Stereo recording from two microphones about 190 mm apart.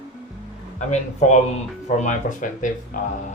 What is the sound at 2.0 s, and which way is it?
Speech, 40° left (ahead or behind).